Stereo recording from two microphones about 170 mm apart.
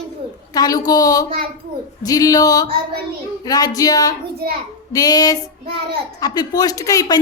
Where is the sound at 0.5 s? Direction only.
25° left (ahead or behind).